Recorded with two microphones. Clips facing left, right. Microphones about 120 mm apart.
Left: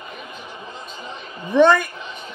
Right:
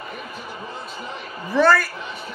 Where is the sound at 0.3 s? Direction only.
20° left (ahead or behind).